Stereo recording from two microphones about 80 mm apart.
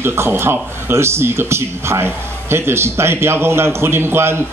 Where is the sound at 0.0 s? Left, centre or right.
Right.